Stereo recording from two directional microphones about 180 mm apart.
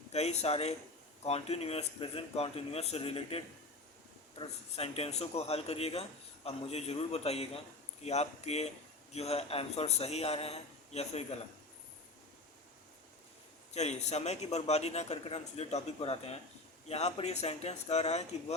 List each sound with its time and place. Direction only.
0.1 s a man's voice: 35° left (ahead or behind)
13.7 s a man's voice: 40° left (ahead or behind)